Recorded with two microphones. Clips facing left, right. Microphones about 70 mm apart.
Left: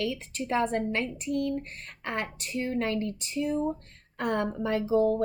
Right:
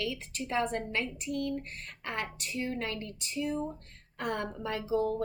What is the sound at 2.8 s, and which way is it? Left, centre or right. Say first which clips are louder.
Speech: left 7 dB; left.